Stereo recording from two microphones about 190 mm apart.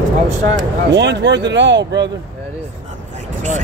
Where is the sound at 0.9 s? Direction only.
65° right (ahead or behind).